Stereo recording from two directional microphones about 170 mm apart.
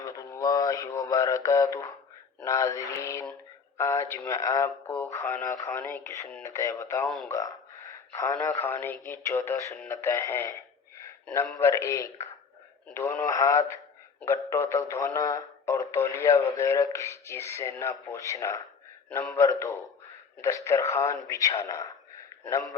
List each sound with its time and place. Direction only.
0.0 s mantra: 20° left (ahead or behind)
2.4 s speech: 20° left (ahead or behind)